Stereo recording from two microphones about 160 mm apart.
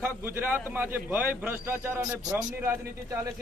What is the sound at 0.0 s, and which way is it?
A man's voice, 15° right (ahead or behind).